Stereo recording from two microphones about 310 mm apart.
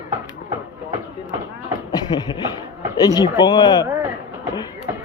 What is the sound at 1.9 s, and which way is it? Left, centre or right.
Beatboxing, centre.